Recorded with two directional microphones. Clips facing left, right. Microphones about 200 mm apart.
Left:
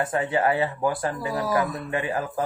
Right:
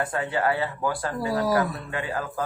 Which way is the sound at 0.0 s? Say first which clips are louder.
Left 2 dB; 20° left (ahead or behind).